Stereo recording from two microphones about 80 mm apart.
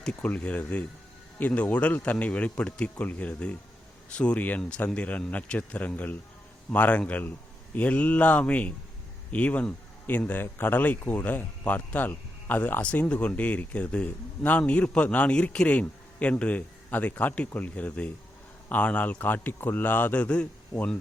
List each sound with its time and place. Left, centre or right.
0.0 s speech: centre